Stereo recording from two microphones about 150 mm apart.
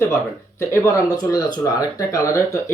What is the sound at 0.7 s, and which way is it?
Speech, 25° left (ahead or behind).